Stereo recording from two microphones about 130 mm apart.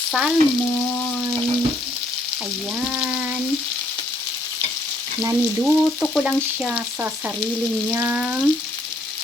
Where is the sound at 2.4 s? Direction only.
Centre (ahead or behind).